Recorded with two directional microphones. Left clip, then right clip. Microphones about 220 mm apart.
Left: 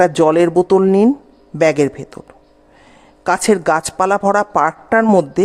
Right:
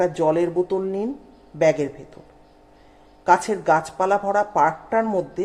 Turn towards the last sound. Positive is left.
turn(degrees=50)  # may be behind; listen again after turning